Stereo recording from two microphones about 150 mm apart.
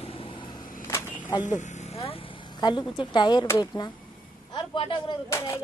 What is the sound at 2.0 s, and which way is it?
Speech, 35° left (ahead or behind).